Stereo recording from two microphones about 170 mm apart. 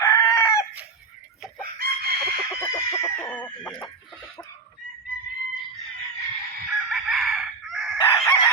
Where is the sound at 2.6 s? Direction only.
15° left (ahead or behind).